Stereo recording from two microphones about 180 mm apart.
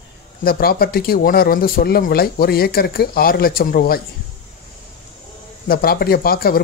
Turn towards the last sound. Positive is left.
turn(degrees=55)  # may be behind; listen again after turning